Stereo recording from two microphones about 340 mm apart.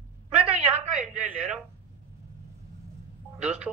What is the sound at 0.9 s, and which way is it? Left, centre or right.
Speech, centre.